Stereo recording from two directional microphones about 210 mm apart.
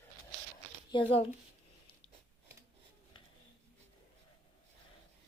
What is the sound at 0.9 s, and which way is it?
Speech, 25° left (ahead or behind).